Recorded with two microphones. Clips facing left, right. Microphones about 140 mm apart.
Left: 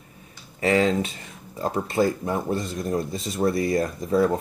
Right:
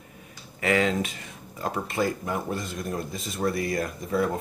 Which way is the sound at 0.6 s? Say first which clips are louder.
Left 3 dB; 30° left (ahead or behind).